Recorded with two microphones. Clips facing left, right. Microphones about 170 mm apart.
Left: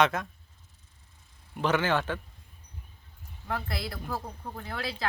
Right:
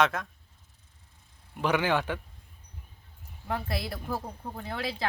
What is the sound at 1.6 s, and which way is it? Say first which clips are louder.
Speech: even; 10° right (ahead or behind).